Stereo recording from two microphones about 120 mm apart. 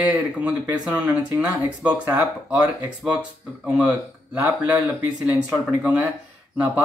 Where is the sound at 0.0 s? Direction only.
10° right (ahead or behind).